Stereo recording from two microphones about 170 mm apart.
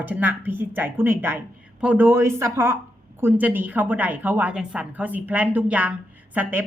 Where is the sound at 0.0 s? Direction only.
10° right (ahead or behind).